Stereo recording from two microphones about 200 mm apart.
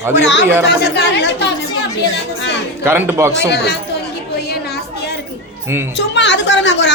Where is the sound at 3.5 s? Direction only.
55° left (ahead or behind).